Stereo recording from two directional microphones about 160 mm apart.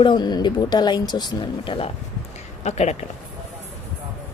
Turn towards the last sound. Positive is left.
turn(degrees=45)  # may be behind; listen again after turning